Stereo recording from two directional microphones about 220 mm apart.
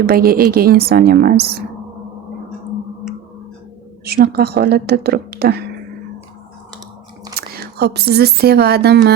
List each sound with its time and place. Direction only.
0.0 s a woman's voice: 45° right (ahead or behind)
4.0 s a woman's voice: 45° right (ahead or behind)
7.3 s speech: 45° right (ahead or behind)